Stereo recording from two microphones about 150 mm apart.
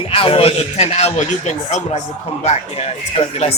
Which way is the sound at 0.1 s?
40° left (ahead or behind).